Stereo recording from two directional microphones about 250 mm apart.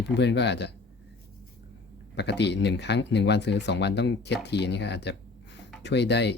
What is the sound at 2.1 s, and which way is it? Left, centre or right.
Speech, left.